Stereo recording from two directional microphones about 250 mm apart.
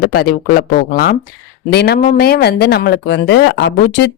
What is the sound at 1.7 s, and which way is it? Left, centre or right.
Speech, left.